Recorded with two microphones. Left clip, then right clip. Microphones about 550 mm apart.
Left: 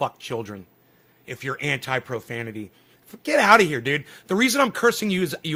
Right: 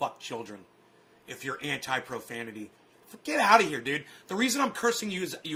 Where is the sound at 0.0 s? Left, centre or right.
Left.